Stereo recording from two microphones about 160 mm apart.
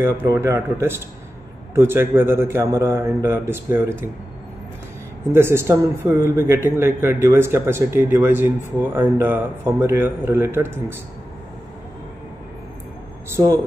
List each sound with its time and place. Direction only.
0.0 s a man's voice: 15° right (ahead or behind)
5.3 s a man's voice: 15° right (ahead or behind)